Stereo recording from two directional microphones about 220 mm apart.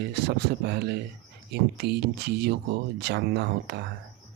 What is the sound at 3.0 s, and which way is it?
Speech, 50° right (ahead or behind).